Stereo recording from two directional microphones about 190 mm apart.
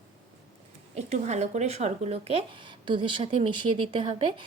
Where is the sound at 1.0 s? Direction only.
35° right (ahead or behind).